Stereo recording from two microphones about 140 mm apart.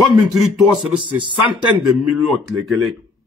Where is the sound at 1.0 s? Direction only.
35° right (ahead or behind).